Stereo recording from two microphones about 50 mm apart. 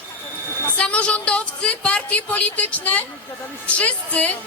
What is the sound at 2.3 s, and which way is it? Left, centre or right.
Speech, left.